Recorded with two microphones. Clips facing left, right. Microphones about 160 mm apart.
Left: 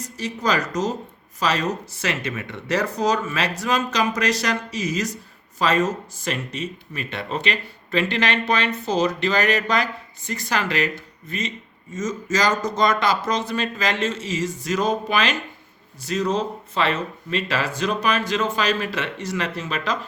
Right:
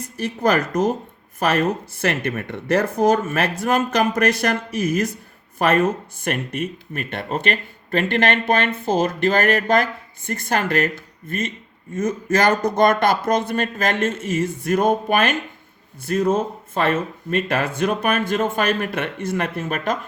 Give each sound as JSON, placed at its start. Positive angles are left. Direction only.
{"t": 0.0, "sound": "speech", "side_deg": -55}